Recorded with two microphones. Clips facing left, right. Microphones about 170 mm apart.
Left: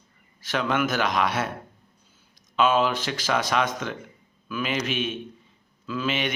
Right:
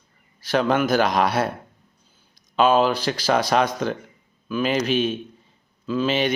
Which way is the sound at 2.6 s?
35° right (ahead or behind).